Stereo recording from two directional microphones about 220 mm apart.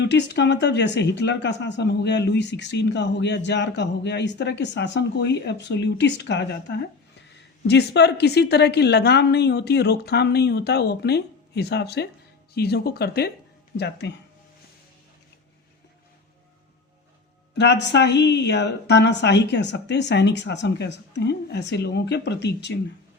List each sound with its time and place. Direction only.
0.0 s speech: 50° left (ahead or behind)
17.6 s speech: 50° left (ahead or behind)